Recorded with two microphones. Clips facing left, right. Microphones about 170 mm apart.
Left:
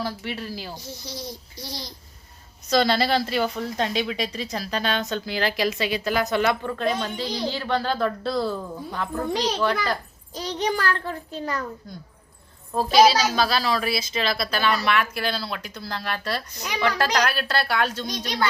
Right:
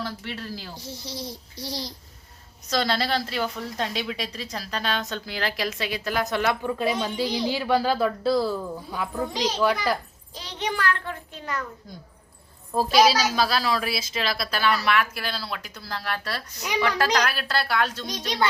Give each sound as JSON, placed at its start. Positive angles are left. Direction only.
{"t": 0.0, "sound": "speech", "side_deg": 10}
{"t": 0.8, "sound": "speech", "side_deg": -30}
{"t": 2.6, "sound": "a woman's voice", "side_deg": 0}
{"t": 10.3, "sound": "a child's voice", "side_deg": 40}
{"t": 13.1, "sound": "a woman's voice", "side_deg": -5}
{"t": 18.0, "sound": "speech", "side_deg": -20}